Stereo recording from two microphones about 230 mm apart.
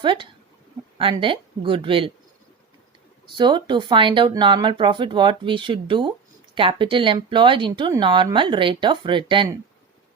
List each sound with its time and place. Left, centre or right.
0.0 s speech: right
3.3 s speech: centre